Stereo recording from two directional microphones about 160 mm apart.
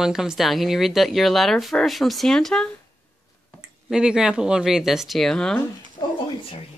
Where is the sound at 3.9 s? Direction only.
5° right (ahead or behind).